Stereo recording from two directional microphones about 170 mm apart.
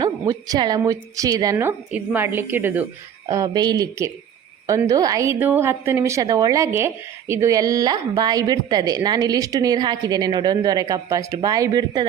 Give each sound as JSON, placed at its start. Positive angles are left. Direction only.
{"t": 0.0, "sound": "a woman's voice", "side_deg": -20}